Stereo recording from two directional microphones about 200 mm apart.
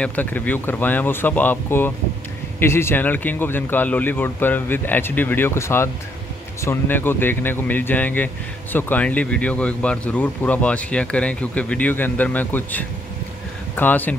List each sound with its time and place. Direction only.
0.0 s speech: 10° left (ahead or behind)